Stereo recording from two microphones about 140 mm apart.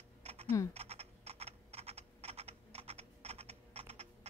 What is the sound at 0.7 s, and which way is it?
Computer keyboard, 45° right (ahead or behind).